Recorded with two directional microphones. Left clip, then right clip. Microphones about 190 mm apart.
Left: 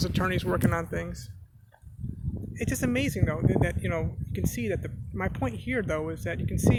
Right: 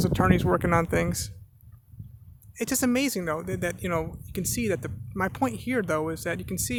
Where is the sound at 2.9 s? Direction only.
30° right (ahead or behind).